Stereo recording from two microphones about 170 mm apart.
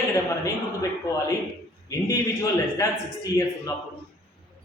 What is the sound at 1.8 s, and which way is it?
Speech, 20° left (ahead or behind).